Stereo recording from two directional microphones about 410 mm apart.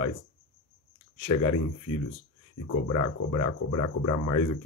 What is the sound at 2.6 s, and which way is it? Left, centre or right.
Speech, left.